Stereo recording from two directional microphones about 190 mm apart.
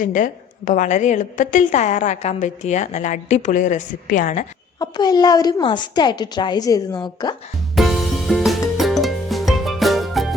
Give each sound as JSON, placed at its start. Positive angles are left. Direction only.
{"t": 0.0, "sound": "a woman's voice", "side_deg": 45}
{"t": 4.8, "sound": "a woman's voice", "side_deg": 20}
{"t": 7.8, "sound": "music", "side_deg": 0}